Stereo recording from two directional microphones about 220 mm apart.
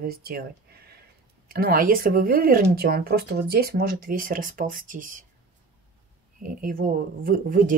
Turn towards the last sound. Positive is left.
turn(degrees=-40)  # may be behind; listen again after turning